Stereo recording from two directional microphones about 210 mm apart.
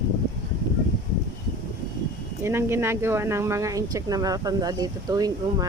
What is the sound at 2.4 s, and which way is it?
Speech, 10° right (ahead or behind).